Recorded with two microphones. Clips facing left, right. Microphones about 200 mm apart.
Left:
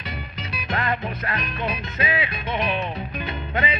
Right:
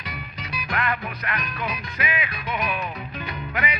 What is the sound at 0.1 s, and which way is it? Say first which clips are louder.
Music: left 1 dB; 25° left (ahead or behind).